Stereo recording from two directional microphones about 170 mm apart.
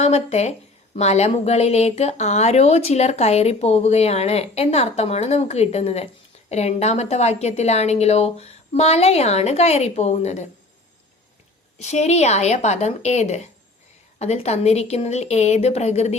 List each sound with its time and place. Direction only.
0.0 s a woman's voice: 40° left (ahead or behind)
11.8 s a woman's voice: 40° left (ahead or behind)